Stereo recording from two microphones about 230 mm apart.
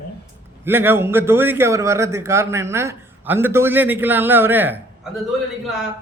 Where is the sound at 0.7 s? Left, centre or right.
Centre.